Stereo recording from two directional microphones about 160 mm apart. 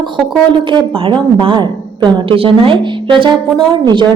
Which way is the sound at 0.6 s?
30° right (ahead or behind).